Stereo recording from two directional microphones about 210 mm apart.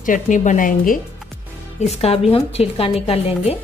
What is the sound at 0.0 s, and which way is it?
A woman's voice, 40° left (ahead or behind).